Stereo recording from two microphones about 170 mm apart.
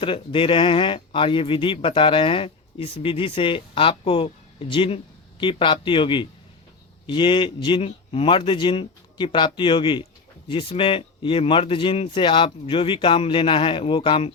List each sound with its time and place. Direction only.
0.0 s speech: 30° left (ahead or behind)